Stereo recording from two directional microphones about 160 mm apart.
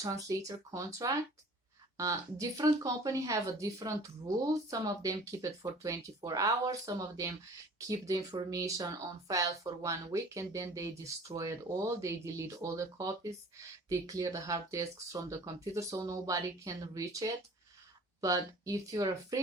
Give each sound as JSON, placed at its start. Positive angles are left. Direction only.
{"t": 0.3, "sound": "speech", "side_deg": -20}